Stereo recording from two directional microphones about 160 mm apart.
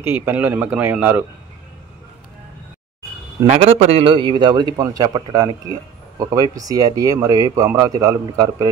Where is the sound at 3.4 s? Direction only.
40° right (ahead or behind).